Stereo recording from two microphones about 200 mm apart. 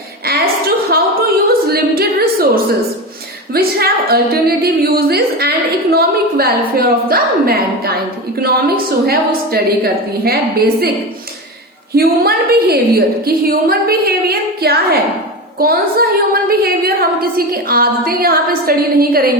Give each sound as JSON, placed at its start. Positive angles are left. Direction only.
{"t": 0.3, "sound": "a sound", "side_deg": -50}
{"t": 3.5, "sound": "a woman's voice", "side_deg": -50}
{"t": 11.9, "sound": "a woman's voice", "side_deg": -50}